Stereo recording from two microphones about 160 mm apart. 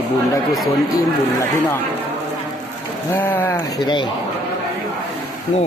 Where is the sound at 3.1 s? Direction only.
10° left (ahead or behind).